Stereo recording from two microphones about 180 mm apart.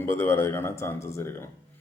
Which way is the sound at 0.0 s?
15° left (ahead or behind).